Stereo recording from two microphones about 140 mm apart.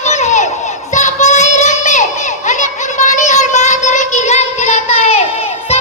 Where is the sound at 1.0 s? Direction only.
55° left (ahead or behind).